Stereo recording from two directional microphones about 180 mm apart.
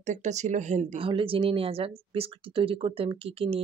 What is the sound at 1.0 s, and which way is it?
Speech, 30° right (ahead or behind).